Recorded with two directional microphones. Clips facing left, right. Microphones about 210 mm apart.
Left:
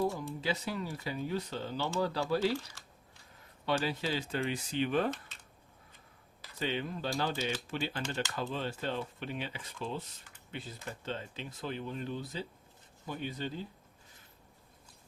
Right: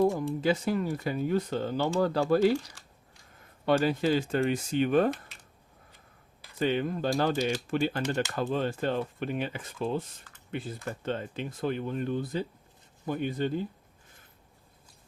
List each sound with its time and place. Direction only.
0.2 s speech: 50° right (ahead or behind)
2.4 s speech: 15° right (ahead or behind)
3.7 s speech: 50° right (ahead or behind)
6.6 s speech: 50° right (ahead or behind)